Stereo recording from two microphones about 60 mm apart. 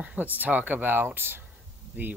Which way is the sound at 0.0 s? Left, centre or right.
Right.